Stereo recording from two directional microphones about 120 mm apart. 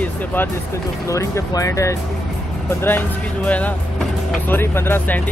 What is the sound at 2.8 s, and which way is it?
Speech, 15° left (ahead or behind).